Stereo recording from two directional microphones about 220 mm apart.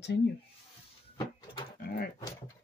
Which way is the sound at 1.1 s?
20° left (ahead or behind).